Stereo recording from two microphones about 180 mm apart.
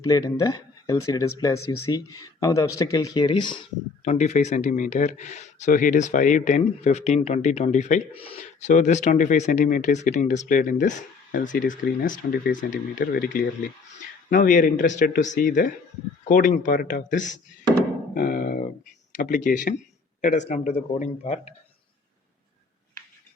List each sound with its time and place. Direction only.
0.0 s speech: 20° left (ahead or behind)
4.0 s speech: 40° left (ahead or behind)
18.1 s a sound: 50° left (ahead or behind)
19.1 s speech: 45° left (ahead or behind)